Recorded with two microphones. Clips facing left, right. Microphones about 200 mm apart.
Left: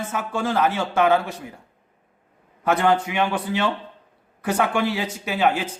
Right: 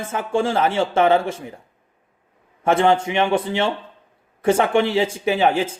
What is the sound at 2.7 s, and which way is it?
Speech, 25° right (ahead or behind).